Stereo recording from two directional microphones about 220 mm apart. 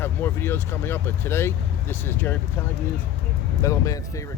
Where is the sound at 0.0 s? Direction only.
10° left (ahead or behind).